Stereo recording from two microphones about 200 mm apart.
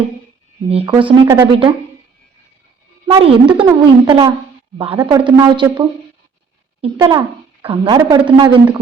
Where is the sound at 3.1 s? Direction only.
30° right (ahead or behind).